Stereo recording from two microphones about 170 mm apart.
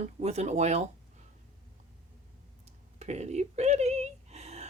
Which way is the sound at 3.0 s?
40° right (ahead or behind).